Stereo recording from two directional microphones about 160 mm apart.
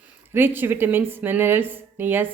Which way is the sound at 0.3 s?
15° right (ahead or behind).